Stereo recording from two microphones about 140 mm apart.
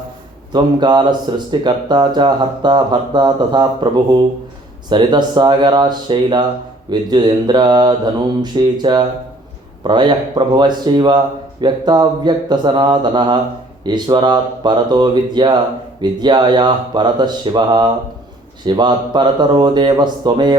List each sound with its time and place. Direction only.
0.5 s speech: 30° right (ahead or behind)
4.9 s speech: 35° right (ahead or behind)